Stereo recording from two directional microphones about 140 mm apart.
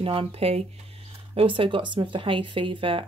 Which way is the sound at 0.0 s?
40° right (ahead or behind).